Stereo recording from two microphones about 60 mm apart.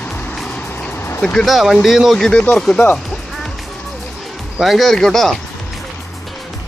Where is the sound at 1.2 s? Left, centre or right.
Centre.